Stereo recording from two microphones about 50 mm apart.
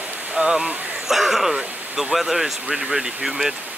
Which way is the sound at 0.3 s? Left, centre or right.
Centre.